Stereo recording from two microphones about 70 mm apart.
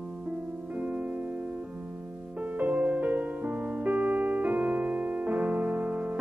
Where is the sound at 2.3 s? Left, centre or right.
Right.